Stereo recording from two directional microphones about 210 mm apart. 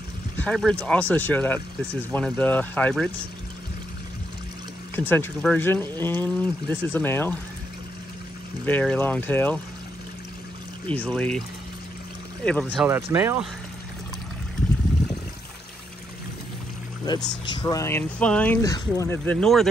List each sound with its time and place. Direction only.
0.4 s speech: 5° left (ahead or behind)
4.9 s speech: 10° left (ahead or behind)
8.6 s speech: 10° left (ahead or behind)
10.9 s speech: 5° left (ahead or behind)
12.6 s speech: 10° right (ahead or behind)
17.1 s speech: 20° left (ahead or behind)
19.3 s speech: centre (ahead or behind)